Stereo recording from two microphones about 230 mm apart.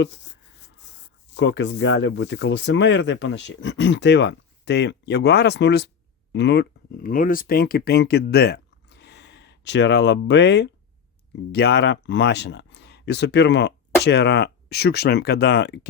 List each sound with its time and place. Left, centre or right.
1.3 s speech: left